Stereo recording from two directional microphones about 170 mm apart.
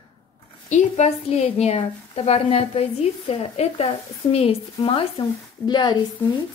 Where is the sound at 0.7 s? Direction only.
45° left (ahead or behind).